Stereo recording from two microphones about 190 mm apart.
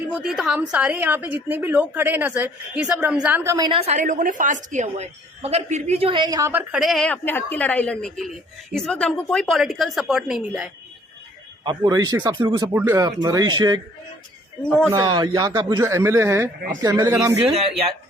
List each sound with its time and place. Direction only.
0.1 s a woman's voice: 5° right (ahead or behind)
3.7 s a woman's voice: 35° right (ahead or behind); by 10.7 s 5° right (ahead or behind)
11.6 s a woman's voice: 20° right (ahead or behind)
14.8 s a woman's voice: 20° right (ahead or behind)
17.6 s speech: 30° right (ahead or behind)